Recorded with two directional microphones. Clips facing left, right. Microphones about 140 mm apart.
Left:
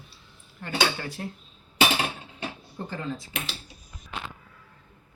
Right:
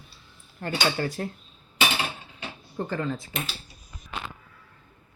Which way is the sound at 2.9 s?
60° right (ahead or behind).